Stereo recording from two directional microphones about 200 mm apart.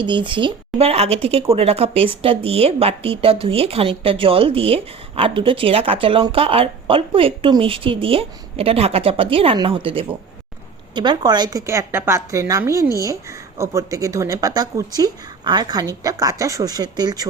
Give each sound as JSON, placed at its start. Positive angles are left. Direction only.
{"t": 0.0, "sound": "a woman's voice", "side_deg": -25}